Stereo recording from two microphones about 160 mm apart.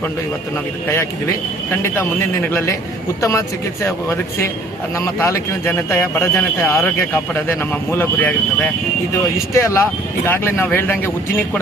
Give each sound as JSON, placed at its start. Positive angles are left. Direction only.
{"t": 2.5, "sound": "speech", "side_deg": 15}